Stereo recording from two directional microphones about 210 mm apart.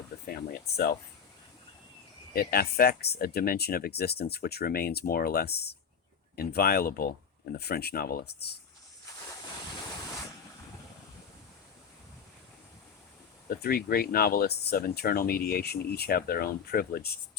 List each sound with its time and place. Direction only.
0.3 s a sound: 45° left (ahead or behind)
2.3 s speech: 45° left (ahead or behind)
13.5 s speech: 45° left (ahead or behind)